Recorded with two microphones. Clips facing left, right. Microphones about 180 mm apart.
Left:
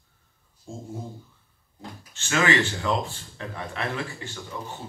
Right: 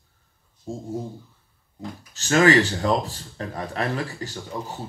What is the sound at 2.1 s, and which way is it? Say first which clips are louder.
Speech: right 6 dB; 40° right (ahead or behind).